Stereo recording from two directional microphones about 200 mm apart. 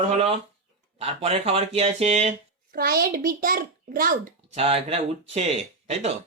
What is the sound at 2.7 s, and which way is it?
A child's voice, 45° right (ahead or behind).